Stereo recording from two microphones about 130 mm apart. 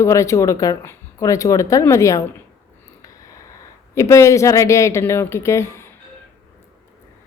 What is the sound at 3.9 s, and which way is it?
A woman's voice, 20° left (ahead or behind).